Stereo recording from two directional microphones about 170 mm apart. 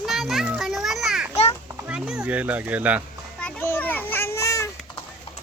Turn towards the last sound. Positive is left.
turn(degrees=20)  # may be behind; listen again after turning